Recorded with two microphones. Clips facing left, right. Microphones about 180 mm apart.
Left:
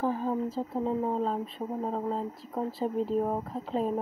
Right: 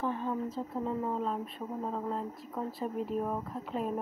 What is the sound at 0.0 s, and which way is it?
Speech, 35° left (ahead or behind).